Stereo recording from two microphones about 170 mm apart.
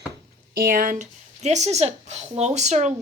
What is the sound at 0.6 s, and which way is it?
Speech, 55° right (ahead or behind).